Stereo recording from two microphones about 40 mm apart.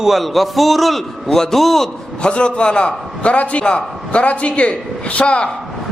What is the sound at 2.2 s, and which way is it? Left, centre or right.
A man's voice, left.